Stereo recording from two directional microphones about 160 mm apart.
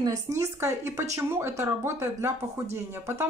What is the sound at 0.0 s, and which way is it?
Speech, 20° right (ahead or behind).